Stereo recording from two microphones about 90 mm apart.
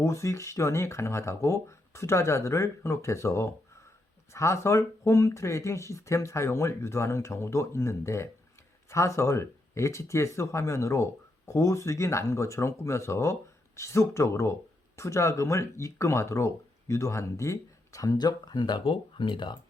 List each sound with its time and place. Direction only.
0.0 s speech: 35° left (ahead or behind); by 19.5 s 60° left (ahead or behind)